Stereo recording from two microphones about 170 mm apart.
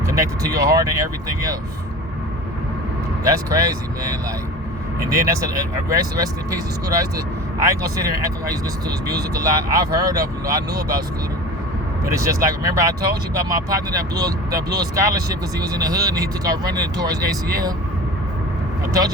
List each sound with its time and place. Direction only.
0.1 s speech: 20° right (ahead or behind)
3.2 s speech: 20° right (ahead or behind)
12.0 s speech: 20° right (ahead or behind)